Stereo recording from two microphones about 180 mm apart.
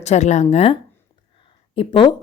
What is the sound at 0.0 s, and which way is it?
A woman's voice, 40° left (ahead or behind).